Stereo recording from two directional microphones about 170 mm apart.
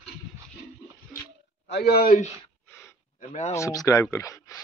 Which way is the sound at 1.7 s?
75° left (ahead or behind).